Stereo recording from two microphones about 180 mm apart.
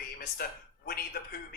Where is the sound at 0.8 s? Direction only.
60° left (ahead or behind).